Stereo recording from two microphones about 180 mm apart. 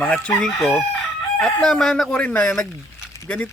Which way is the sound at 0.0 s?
5° left (ahead or behind).